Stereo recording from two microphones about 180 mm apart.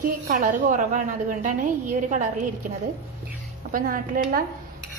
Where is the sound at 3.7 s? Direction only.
50° right (ahead or behind).